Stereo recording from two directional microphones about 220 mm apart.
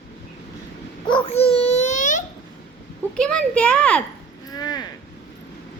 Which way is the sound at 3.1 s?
5° left (ahead or behind).